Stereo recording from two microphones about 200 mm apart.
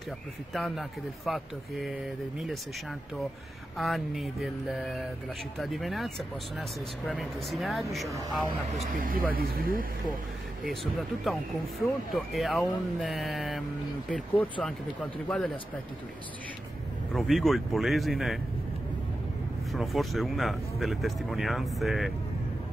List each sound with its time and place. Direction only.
0.5 s speech: centre (ahead or behind)
3.7 s speech: centre (ahead or behind)
8.9 s speech: 45° right (ahead or behind)
10.6 s speech: centre (ahead or behind)
17.1 s speech: centre (ahead or behind)
19.7 s speech: centre (ahead or behind)